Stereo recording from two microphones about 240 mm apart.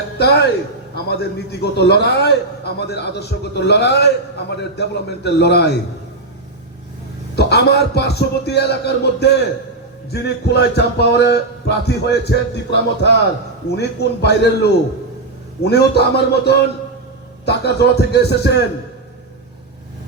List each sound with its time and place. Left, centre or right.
0.2 s a man's voice: left
7.3 s a man's voice: left